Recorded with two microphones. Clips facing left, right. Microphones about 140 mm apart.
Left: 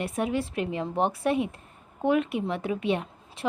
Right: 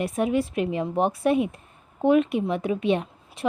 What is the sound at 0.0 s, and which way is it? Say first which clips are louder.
Speech: right 4 dB; 20° right (ahead or behind).